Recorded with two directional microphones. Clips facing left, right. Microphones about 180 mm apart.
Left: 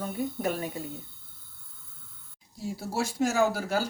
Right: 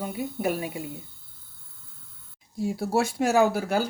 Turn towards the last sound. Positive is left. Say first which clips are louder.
# right 4 dB
turn(degrees=-60)  # may be behind; listen again after turning